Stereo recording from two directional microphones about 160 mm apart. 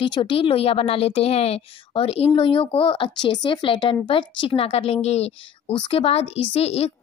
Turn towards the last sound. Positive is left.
turn(degrees=40)  # may be behind; listen again after turning